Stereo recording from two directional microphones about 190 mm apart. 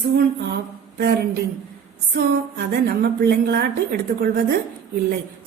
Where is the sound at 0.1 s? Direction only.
55° right (ahead or behind).